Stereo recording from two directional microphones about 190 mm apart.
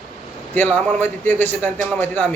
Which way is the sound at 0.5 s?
10° left (ahead or behind).